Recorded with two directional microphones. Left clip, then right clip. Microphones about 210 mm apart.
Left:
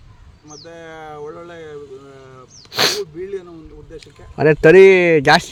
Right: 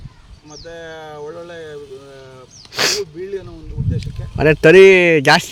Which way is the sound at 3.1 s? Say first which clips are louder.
Right 1 dB; 20° left (ahead or behind).